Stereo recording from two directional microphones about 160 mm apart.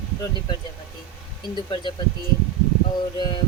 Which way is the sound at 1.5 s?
30° left (ahead or behind).